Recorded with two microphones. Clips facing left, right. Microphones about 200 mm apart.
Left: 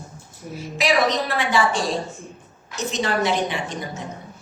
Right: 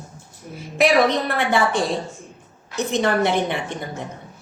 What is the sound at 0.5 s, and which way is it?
A woman's voice, 55° right (ahead or behind).